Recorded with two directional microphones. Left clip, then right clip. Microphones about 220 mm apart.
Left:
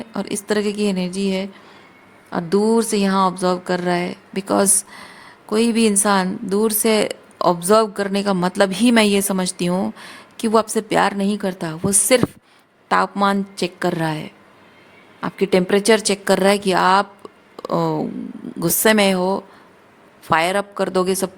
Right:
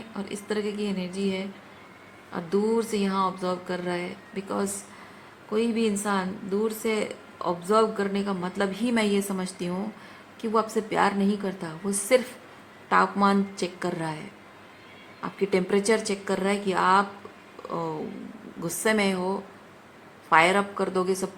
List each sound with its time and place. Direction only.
0.1 s a woman's voice: 55° left (ahead or behind)